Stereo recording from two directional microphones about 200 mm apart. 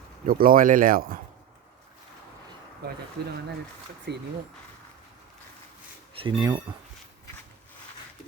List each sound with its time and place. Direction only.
0.3 s speech: 45° right (ahead or behind)
4.1 s speech: 55° right (ahead or behind)
6.1 s speech: 25° right (ahead or behind)